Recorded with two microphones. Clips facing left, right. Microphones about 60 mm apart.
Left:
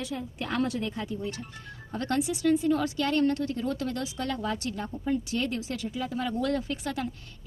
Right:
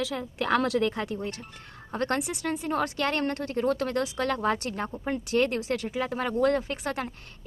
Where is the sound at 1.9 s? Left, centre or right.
Right.